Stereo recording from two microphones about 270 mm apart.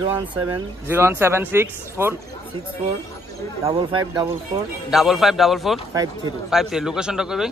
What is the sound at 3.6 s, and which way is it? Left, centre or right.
Speech, centre.